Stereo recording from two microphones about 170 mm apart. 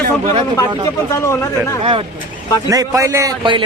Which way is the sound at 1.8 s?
30° right (ahead or behind).